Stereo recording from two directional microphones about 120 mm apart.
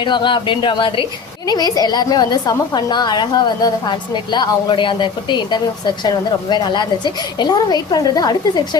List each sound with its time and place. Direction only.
0.0 s a woman's voice: 40° left (ahead or behind)